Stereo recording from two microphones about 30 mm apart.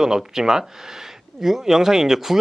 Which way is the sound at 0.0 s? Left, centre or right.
Centre.